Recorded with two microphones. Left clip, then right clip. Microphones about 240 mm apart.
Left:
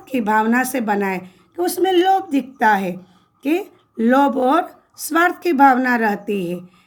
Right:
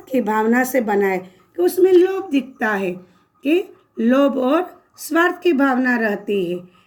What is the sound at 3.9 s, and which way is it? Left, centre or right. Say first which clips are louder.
Speech: left 1 dB; left.